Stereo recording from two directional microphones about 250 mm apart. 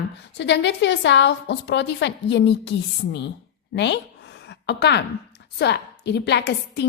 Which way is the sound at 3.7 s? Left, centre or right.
Left.